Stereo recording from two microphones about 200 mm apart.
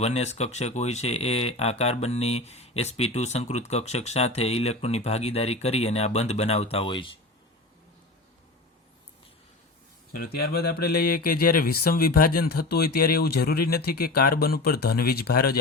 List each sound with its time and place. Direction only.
0.0 s speech: 35° left (ahead or behind)
10.1 s speech: 50° left (ahead or behind)